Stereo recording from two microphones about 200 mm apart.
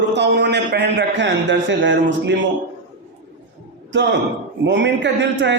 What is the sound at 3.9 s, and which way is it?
A man's voice, 60° right (ahead or behind).